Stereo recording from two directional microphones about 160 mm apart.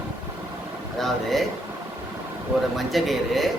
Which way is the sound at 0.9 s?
Centre (ahead or behind).